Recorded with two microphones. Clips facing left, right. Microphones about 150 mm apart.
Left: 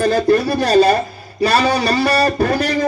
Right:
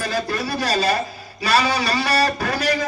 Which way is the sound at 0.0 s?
50° left (ahead or behind).